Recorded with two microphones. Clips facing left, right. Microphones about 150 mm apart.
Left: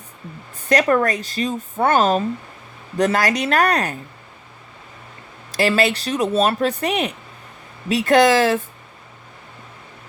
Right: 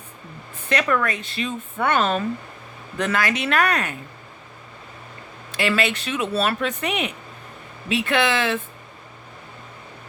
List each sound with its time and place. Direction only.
0.7 s speech: 40° left (ahead or behind)
5.5 s speech: 35° left (ahead or behind)